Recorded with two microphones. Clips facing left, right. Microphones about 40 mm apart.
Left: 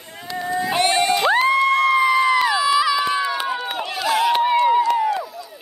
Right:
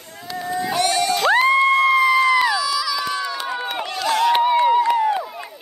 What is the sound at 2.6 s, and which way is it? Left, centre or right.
Run, left.